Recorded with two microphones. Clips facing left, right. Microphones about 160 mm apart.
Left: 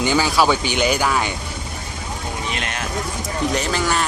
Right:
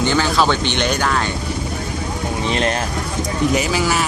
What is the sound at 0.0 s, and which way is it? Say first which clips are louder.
Speech: right 1 dB; 10° left (ahead or behind).